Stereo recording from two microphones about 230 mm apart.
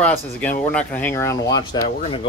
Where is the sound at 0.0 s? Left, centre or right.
Centre.